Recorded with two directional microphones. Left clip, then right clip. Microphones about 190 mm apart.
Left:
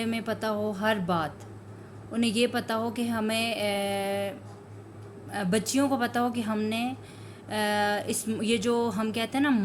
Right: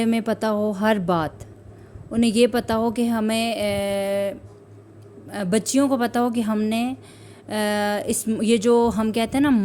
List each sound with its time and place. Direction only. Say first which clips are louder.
0.0 s speech: right 8 dB; 60° right (ahead or behind)